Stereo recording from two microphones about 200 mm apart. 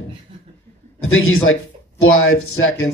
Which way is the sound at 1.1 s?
85° left.